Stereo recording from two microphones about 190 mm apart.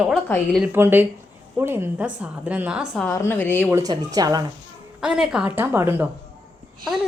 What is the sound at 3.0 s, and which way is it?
Speech, 10° left (ahead or behind).